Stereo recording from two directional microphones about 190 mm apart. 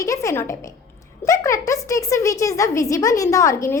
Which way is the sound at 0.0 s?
15° left (ahead or behind).